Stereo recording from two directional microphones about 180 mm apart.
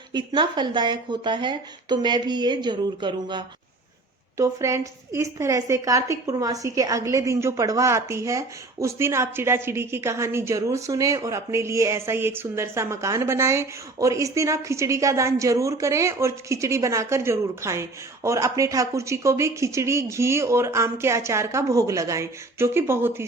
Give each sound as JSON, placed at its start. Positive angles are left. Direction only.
{"t": 0.1, "sound": "a woman's voice", "side_deg": -25}